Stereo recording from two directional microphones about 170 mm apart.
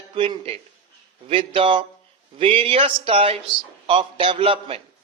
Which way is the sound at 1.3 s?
30° right (ahead or behind).